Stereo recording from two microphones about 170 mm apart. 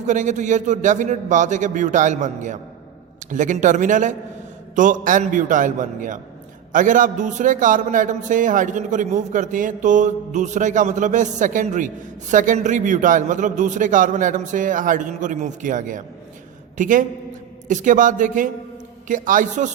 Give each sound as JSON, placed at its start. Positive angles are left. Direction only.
{"t": 0.1, "sound": "a man's voice", "side_deg": -45}